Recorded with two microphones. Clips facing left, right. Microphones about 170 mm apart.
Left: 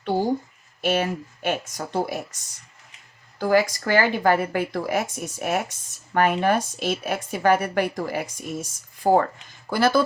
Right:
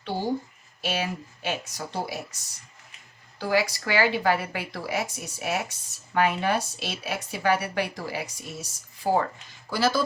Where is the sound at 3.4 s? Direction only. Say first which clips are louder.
Left 5 dB; 50° left (ahead or behind).